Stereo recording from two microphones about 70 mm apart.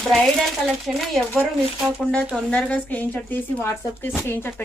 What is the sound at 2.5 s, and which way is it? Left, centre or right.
Speech, centre.